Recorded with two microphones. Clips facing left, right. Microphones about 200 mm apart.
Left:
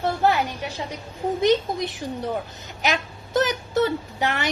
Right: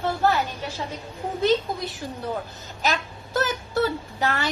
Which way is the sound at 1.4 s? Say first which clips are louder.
Left 1 dB; 20° left (ahead or behind).